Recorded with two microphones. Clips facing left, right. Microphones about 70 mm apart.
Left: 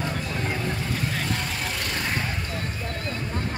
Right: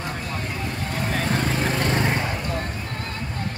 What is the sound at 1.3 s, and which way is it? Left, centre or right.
Vehicle, right.